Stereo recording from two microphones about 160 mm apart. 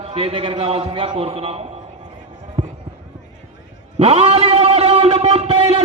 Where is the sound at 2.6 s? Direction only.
35° right (ahead or behind).